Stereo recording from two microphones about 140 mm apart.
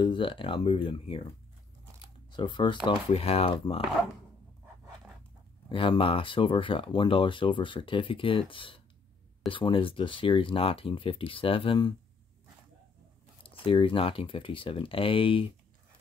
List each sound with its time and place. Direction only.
0.0 s speech: 35° left (ahead or behind)
2.3 s speech: 35° left (ahead or behind)
5.7 s speech: 40° left (ahead or behind)
13.4 s speech: 40° left (ahead or behind)